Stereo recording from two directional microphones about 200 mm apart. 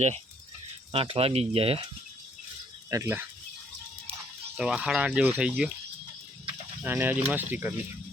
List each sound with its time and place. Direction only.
0.9 s speech: 30° right (ahead or behind)
2.9 s speech: 15° right (ahead or behind)
4.5 s speech: 5° right (ahead or behind)
6.8 s speech: 10° right (ahead or behind)